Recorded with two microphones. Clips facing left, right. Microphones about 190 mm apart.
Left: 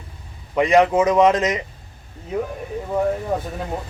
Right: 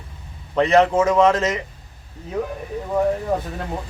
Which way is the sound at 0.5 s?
15° left (ahead or behind).